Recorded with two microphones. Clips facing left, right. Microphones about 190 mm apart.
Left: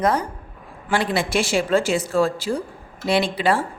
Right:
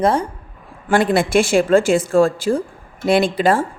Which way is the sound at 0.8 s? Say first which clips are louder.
Right 6 dB; 50° right (ahead or behind).